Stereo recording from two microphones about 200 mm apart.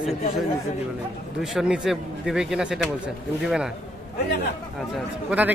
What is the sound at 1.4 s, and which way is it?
A man's voice, 5° right (ahead or behind).